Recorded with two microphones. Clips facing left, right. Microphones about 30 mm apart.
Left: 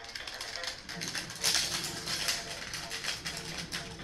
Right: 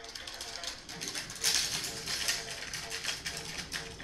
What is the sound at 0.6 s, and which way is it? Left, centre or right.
Music, left.